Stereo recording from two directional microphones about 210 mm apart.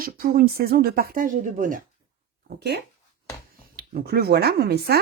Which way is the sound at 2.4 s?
50° right (ahead or behind).